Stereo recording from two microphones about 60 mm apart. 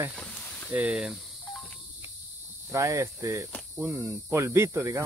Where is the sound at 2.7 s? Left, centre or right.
Right.